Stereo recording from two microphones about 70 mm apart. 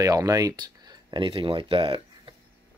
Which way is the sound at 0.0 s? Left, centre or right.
Right.